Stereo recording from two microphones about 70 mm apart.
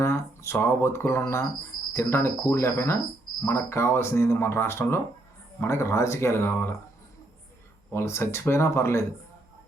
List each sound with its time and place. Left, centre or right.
0.0 s speech: left
7.9 s speech: left